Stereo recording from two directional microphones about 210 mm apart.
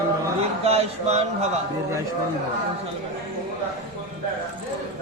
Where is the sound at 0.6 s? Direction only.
30° right (ahead or behind).